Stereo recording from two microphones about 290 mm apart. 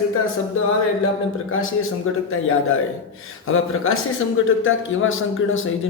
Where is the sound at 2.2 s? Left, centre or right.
Left.